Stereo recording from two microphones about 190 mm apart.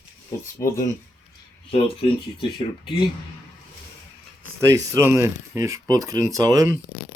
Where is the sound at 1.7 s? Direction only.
30° left (ahead or behind).